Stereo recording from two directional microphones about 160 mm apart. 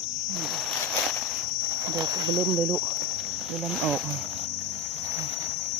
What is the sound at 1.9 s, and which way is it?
Speech, 20° right (ahead or behind).